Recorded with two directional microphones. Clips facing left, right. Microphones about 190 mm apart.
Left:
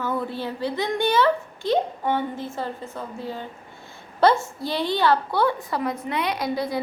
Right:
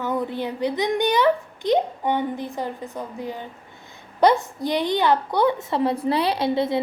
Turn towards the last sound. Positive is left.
turn(degrees=-25)  # may be behind; listen again after turning